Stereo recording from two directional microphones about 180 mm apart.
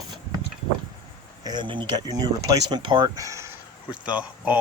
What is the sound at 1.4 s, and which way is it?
Speech, 25° right (ahead or behind).